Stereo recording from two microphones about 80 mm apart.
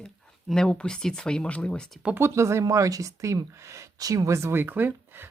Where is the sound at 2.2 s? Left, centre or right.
Right.